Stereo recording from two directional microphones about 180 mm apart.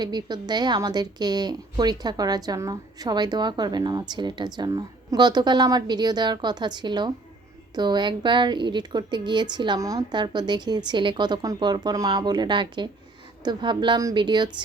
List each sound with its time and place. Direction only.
0.0 s a woman's voice: 25° right (ahead or behind)